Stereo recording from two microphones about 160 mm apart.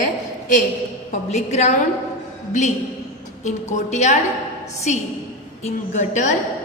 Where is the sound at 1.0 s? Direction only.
45° left (ahead or behind).